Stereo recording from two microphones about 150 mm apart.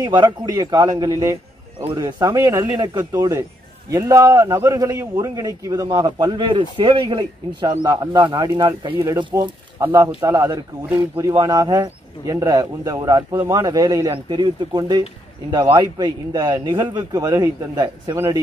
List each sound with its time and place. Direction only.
0.0 s a man's voice: 25° right (ahead or behind)